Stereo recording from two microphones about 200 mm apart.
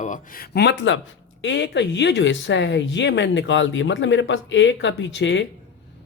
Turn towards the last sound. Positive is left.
turn(degrees=65)  # may be behind; listen again after turning